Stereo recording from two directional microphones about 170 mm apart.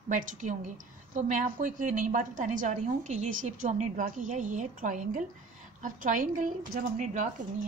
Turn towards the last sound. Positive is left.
turn(degrees=-50)  # may be behind; listen again after turning